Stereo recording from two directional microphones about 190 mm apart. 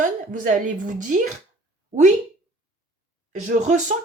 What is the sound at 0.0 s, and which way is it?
A woman's voice, 40° right (ahead or behind).